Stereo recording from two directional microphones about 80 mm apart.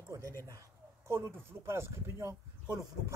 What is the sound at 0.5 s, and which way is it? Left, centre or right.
Bird, right.